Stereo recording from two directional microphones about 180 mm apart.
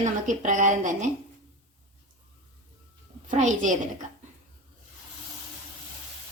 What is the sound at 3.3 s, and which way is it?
Speech, 45° right (ahead or behind).